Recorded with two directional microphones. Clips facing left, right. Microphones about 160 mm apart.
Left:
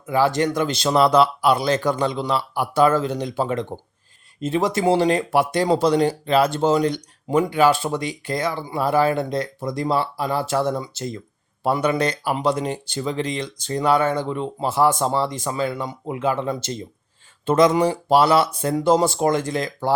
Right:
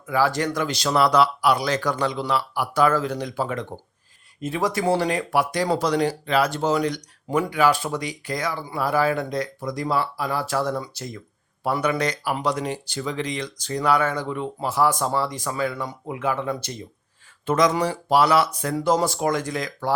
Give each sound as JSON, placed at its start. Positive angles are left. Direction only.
{"t": 0.1, "sound": "speech", "side_deg": 20}